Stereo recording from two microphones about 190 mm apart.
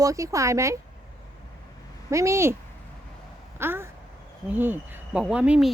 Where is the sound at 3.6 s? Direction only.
10° right (ahead or behind).